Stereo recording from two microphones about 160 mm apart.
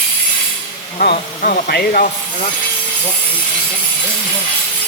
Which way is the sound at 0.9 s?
60° left (ahead or behind).